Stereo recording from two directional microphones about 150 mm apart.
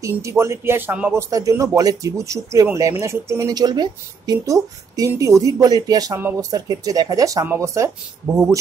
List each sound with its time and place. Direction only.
0.0 s speech: 20° right (ahead or behind)
1.3 s speech: 20° right (ahead or behind)